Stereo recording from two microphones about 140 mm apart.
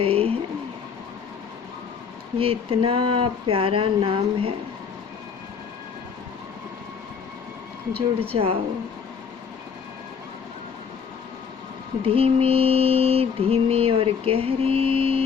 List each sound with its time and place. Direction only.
0.0 s a sound: 40° right (ahead or behind)
2.4 s speech: 40° right (ahead or behind)
7.9 s speech: 40° right (ahead or behind)
12.0 s mantra: 40° right (ahead or behind)